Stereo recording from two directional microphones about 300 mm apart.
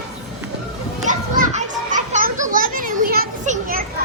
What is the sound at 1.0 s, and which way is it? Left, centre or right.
Children playing, right.